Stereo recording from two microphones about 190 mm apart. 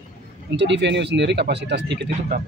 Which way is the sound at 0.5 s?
65° right (ahead or behind).